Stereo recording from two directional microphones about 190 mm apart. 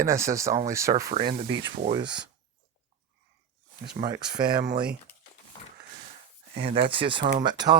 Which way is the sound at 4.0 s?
20° right (ahead or behind).